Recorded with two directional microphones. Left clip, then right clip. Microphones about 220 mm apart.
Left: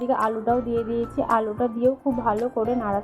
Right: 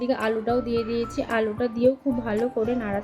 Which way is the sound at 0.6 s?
50° right (ahead or behind).